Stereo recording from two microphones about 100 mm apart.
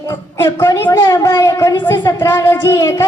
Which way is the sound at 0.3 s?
25° left (ahead or behind).